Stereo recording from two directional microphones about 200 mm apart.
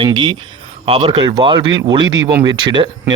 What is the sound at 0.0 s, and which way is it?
A man's voice, 25° right (ahead or behind).